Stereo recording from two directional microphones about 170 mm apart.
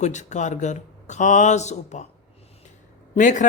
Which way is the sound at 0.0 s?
45° left (ahead or behind).